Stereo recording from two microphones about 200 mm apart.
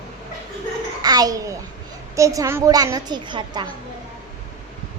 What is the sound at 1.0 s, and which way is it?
A child's voice, 20° right (ahead or behind).